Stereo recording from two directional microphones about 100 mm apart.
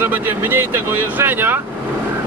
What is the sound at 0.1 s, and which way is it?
Speech, 20° right (ahead or behind).